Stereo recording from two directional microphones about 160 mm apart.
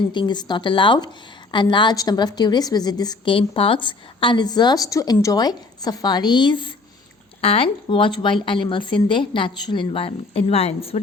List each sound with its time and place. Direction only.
0.1 s a woman's voice: 30° left (ahead or behind)